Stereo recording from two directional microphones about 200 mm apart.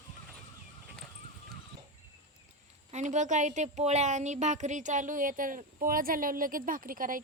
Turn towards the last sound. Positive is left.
turn(degrees=-45)  # may be behind; listen again after turning